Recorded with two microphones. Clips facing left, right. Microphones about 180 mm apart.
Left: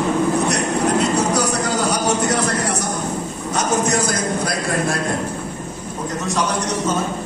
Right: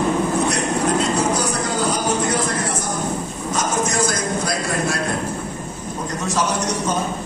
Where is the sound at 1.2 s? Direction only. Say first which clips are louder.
Left 1 dB; 70° left (ahead or behind).